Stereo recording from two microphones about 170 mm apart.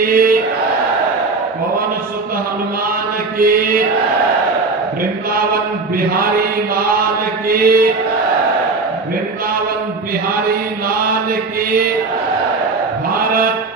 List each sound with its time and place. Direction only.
0.0 s a sound: 60° right (ahead or behind)
3.3 s mantra: 60° right (ahead or behind)
6.0 s chant: 60° right (ahead or behind)
7.4 s mantra: 60° right (ahead or behind)
13.1 s sheep: 55° right (ahead or behind)